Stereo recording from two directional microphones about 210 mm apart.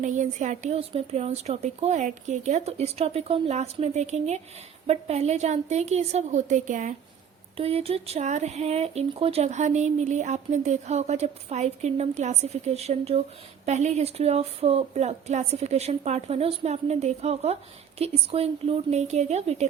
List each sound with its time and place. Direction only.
0.0 s a woman's voice: 35° right (ahead or behind)